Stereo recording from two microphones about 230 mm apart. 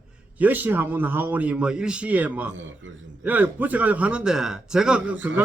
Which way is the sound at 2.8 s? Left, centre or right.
Right.